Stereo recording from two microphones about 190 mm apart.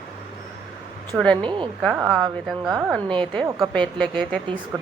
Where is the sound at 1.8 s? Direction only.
5° right (ahead or behind).